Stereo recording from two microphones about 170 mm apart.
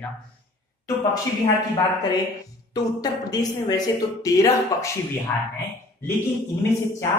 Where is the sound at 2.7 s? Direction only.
20° left (ahead or behind).